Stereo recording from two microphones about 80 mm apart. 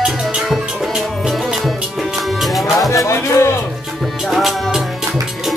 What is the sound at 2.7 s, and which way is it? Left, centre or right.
Music, left.